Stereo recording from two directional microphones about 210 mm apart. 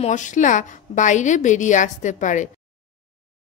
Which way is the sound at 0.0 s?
35° left (ahead or behind).